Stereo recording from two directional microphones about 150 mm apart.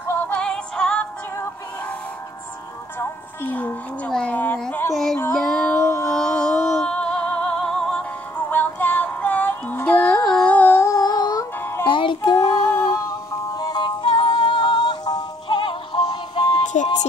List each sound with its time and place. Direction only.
0.3 s music: 5° left (ahead or behind)
3.0 s music: 15° left (ahead or behind)
5.2 s child singing: 5° left (ahead or behind)
5.8 s a sound: 20° left (ahead or behind)
6.0 s music: 5° left (ahead or behind); by 16.6 s 30° left (ahead or behind)